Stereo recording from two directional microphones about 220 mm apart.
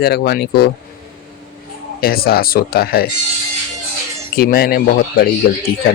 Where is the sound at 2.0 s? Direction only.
45° left (ahead or behind).